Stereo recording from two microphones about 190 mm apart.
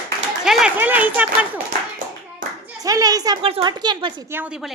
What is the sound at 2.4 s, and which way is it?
Clapping, 45° right (ahead or behind).